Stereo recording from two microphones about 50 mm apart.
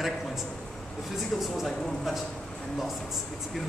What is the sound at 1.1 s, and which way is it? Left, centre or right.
Speech, centre.